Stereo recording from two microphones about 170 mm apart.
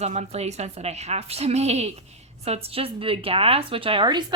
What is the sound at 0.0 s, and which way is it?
A woman's voice, 40° right (ahead or behind).